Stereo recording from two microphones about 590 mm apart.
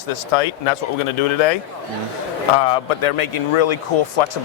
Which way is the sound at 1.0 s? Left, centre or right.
Left.